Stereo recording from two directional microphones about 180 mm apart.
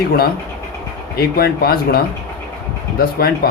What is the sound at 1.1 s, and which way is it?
Speech, 60° left (ahead or behind).